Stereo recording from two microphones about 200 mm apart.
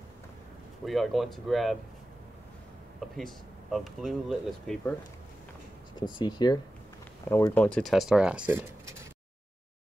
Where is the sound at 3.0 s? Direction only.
Centre (ahead or behind).